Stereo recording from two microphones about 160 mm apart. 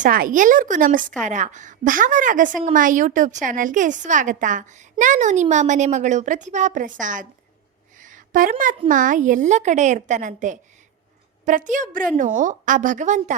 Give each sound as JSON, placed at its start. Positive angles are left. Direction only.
{"t": 0.0, "sound": "a woman's voice", "side_deg": -60}
{"t": 7.9, "sound": "a sound", "side_deg": -55}
{"t": 8.9, "sound": "a woman's voice", "side_deg": -55}